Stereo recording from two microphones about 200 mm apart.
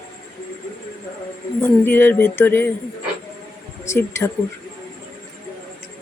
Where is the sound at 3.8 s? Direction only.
15° left (ahead or behind).